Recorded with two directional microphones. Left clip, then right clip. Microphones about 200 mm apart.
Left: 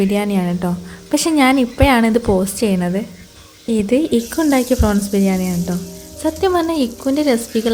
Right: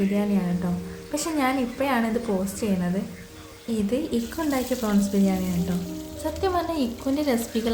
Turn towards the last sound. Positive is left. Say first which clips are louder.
# left 8 dB
turn(degrees=35)  # may be behind; listen again after turning